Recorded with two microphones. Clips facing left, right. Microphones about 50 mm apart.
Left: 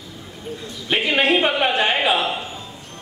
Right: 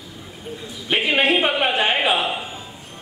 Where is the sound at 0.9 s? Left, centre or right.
Centre.